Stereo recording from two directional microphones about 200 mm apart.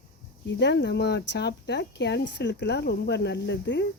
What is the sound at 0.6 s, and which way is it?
Speech, 60° left (ahead or behind).